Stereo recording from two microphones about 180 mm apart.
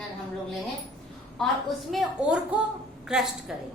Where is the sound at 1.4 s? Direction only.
Centre (ahead or behind).